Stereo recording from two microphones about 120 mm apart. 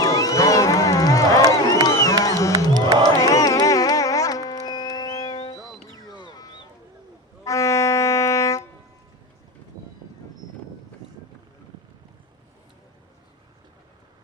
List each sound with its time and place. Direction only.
0.0 s crowd: 30° left (ahead or behind)
1.9 s a sound: 25° left (ahead or behind)
2.7 s music: 35° right (ahead or behind)
3.2 s music: 30° left (ahead or behind)
6.1 s a sound: 35° left (ahead or behind)
7.4 s music: 25° left (ahead or behind)